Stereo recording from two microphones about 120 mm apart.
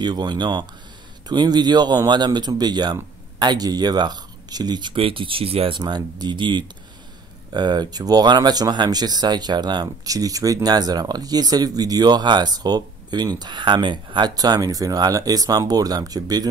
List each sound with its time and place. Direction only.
0.0 s speech: 35° right (ahead or behind)